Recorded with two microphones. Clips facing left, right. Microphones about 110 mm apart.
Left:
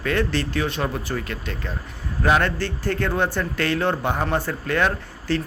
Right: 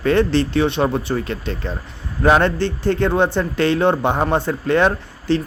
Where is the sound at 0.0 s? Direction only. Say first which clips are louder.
Right 7 dB; 25° right (ahead or behind).